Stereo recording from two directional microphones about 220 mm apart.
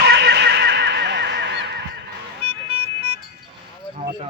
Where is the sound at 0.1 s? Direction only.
50° right (ahead or behind).